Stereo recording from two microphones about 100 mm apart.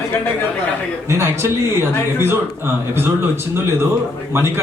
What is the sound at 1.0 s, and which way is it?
Speech, 25° right (ahead or behind).